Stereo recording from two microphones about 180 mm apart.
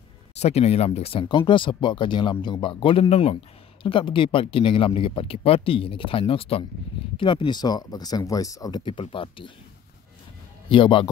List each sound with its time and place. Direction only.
0.4 s speech: 35° left (ahead or behind)
10.7 s speech: 25° left (ahead or behind)